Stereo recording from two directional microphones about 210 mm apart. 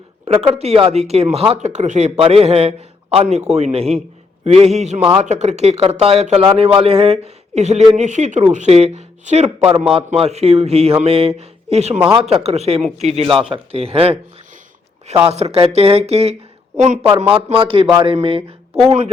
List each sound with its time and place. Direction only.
0.4 s a man's voice: 30° right (ahead or behind)
13.2 s speech: centre (ahead or behind)
13.5 s speech: 30° right (ahead or behind)
15.3 s a man's voice: 30° right (ahead or behind)